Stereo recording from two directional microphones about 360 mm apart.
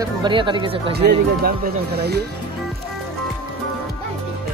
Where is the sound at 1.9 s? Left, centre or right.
Right.